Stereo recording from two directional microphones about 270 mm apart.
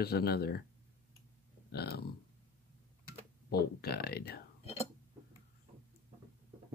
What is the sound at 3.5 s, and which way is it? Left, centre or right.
Speech, left.